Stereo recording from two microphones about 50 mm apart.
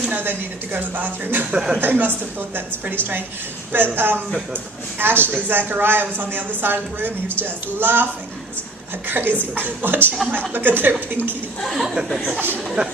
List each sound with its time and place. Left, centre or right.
0.2 s a woman's voice: right
1.5 s speech: centre
1.8 s a woman's voice: right
11.6 s speech: centre